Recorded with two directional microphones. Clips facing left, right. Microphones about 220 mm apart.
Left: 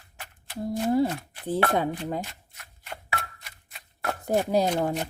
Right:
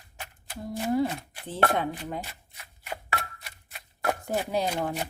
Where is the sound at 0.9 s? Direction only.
40° left (ahead or behind).